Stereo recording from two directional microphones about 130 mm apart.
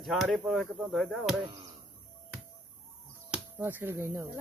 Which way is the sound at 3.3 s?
15° right (ahead or behind).